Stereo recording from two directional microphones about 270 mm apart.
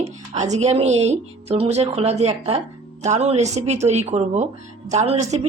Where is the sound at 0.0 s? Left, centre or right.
Right.